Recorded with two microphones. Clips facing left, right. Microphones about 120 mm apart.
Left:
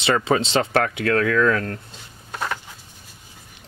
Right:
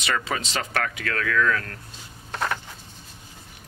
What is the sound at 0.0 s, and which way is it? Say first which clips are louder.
Speech: left 8 dB; 30° left (ahead or behind).